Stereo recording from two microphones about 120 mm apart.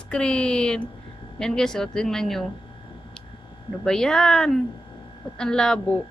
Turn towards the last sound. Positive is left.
turn(degrees=5)  # may be behind; listen again after turning